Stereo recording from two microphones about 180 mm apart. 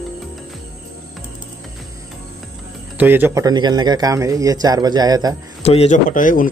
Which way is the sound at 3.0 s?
10° right (ahead or behind).